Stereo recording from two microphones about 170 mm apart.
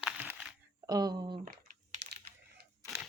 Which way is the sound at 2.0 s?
80° right.